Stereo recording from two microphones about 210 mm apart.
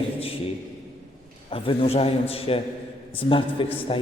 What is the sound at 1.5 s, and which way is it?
A man's voice, 25° left (ahead or behind).